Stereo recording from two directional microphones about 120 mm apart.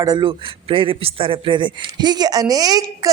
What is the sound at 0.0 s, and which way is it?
Speech, 35° right (ahead or behind).